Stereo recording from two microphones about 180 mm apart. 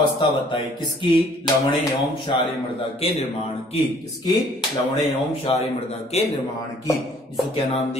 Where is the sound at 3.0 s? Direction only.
35° left (ahead or behind).